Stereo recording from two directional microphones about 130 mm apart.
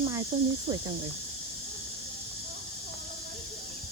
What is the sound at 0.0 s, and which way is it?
Snake, 25° right (ahead or behind).